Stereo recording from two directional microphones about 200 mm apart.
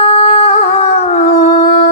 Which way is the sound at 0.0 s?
30° left (ahead or behind).